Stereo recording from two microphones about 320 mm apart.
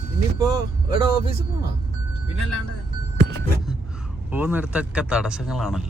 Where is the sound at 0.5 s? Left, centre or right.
Centre.